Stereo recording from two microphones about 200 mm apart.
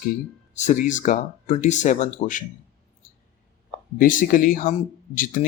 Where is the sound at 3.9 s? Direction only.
40° left (ahead or behind).